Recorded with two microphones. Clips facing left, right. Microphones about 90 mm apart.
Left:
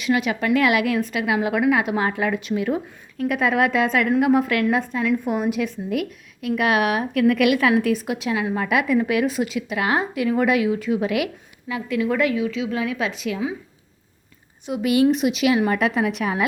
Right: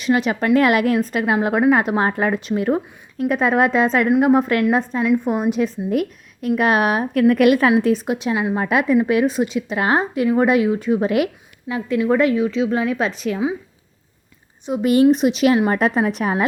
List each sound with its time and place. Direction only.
0.0 s a woman's voice: 35° right (ahead or behind)
14.7 s speech: 40° right (ahead or behind)